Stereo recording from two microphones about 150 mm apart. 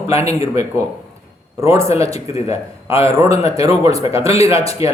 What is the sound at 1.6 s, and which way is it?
A man's voice, 20° right (ahead or behind).